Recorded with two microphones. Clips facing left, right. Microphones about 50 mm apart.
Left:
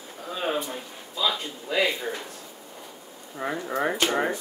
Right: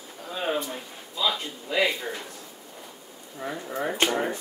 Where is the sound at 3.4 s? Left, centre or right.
Left.